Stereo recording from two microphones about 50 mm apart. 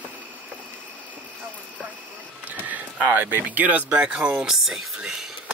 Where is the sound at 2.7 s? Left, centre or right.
Right; by 5.3 s centre.